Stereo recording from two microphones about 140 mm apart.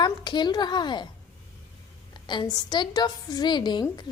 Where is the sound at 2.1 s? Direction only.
35° left (ahead or behind).